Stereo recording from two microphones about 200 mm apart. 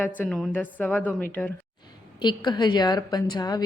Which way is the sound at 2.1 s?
20° left (ahead or behind).